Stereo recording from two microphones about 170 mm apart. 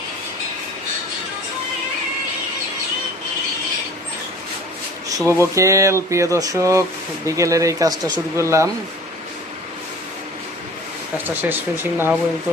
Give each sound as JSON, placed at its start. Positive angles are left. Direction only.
{"t": 5.0, "sound": "speech", "side_deg": -15}
{"t": 11.4, "sound": "speech", "side_deg": -15}